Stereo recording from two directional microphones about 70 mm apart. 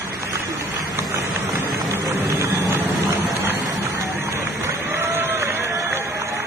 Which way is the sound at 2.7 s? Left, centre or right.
Right.